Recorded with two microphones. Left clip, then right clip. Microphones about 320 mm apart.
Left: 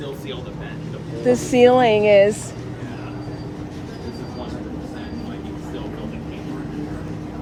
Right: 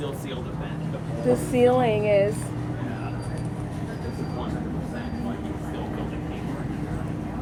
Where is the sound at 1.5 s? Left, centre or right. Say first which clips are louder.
Left 8 dB; left.